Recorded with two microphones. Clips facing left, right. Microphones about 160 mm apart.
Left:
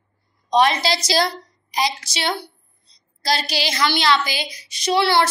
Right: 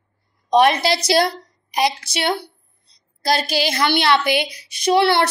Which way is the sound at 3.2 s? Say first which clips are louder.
Right 3 dB; 50° right (ahead or behind).